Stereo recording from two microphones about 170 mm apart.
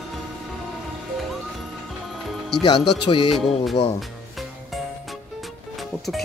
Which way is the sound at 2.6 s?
25° left (ahead or behind).